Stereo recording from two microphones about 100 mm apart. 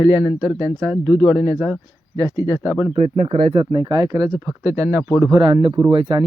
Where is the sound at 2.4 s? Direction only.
35° left (ahead or behind).